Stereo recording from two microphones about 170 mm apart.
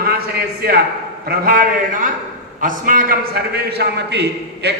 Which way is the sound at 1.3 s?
60° right (ahead or behind).